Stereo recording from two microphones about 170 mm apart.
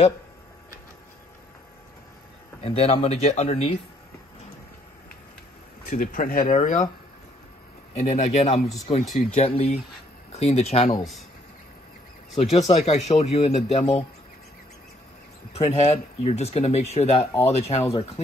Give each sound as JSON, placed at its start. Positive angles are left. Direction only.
{"t": 2.6, "sound": "speech", "side_deg": 35}
{"t": 5.9, "sound": "speech", "side_deg": 55}
{"t": 8.0, "sound": "speech", "side_deg": 40}
{"t": 8.6, "sound": "speech", "side_deg": 20}
{"t": 9.1, "sound": "speech", "side_deg": 35}
{"t": 12.5, "sound": "speech", "side_deg": 40}
{"t": 15.5, "sound": "speech", "side_deg": 40}